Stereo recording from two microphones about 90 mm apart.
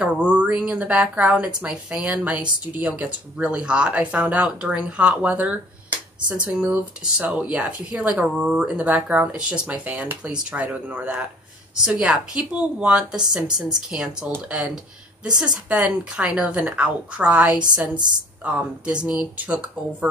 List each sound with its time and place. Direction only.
0.0 s speech: 15° right (ahead or behind)
15.7 s speech: 15° right (ahead or behind)